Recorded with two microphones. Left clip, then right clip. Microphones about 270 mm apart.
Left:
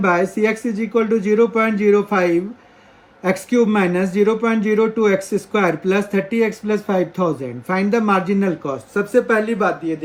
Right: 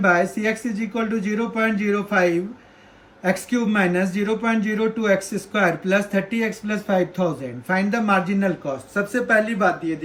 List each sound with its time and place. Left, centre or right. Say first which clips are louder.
0.0 s speech: left 2 dB; centre